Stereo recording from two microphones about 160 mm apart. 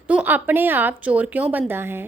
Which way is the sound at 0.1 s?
10° right (ahead or behind).